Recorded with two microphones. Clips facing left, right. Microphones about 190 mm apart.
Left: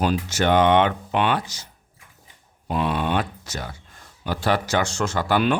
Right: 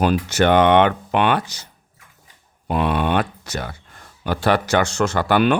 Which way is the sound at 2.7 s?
60° right (ahead or behind).